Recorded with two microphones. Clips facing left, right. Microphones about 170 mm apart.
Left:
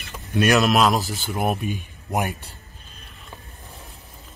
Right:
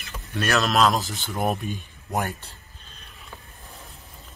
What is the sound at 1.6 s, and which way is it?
Speech, 15° left (ahead or behind).